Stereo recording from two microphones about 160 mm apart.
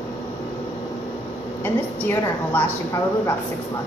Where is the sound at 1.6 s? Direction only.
15° left (ahead or behind).